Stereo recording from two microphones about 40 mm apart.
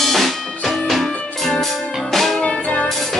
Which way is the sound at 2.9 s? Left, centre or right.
Centre.